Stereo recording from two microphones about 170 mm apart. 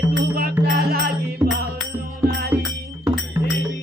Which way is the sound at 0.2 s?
65° right (ahead or behind).